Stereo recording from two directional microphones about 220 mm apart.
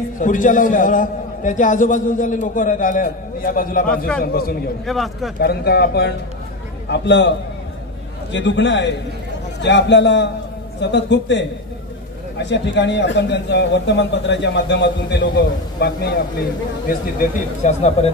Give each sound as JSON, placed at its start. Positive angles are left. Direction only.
{"t": 0.2, "sound": "a man's voice", "side_deg": 35}
{"t": 4.8, "sound": "speech", "side_deg": 0}
{"t": 5.4, "sound": "a man's voice", "side_deg": 45}
{"t": 16.8, "sound": "a man's voice", "side_deg": 35}